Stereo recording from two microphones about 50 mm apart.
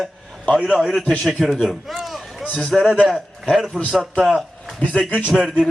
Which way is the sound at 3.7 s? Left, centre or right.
Left.